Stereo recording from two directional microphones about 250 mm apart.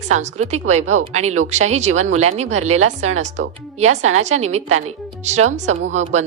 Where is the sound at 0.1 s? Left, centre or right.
Right.